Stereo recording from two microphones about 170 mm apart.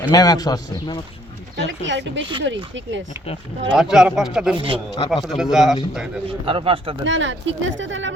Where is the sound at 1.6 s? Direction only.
90° right.